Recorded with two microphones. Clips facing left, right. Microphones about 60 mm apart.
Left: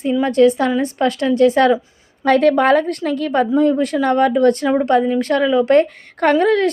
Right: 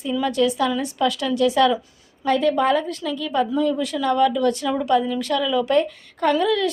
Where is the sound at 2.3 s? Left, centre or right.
Left.